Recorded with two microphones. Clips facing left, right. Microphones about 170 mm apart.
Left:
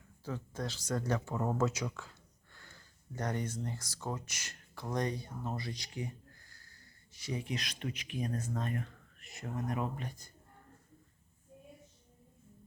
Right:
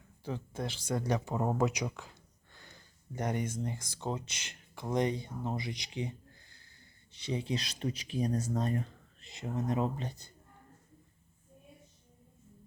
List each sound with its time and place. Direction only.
0.3 s speech: 20° right (ahead or behind)